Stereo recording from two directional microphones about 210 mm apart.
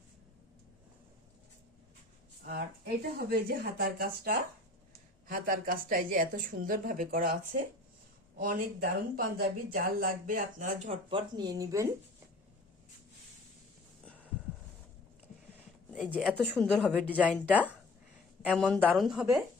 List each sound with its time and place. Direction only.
2.4 s speech: 45° right (ahead or behind)
8.4 s speech: 40° right (ahead or behind)
11.1 s speech: 20° right (ahead or behind)
15.9 s speech: 5° right (ahead or behind)
16.6 s a woman's voice: 5° left (ahead or behind)